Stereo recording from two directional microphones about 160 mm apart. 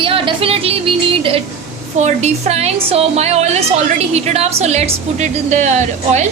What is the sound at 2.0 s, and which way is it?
A woman's voice, 45° right (ahead or behind).